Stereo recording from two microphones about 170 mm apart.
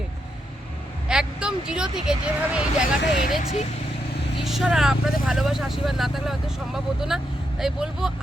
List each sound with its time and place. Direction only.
1.0 s speech: 5° right (ahead or behind)
3.0 s speech: 80° left
4.4 s speech: centre (ahead or behind)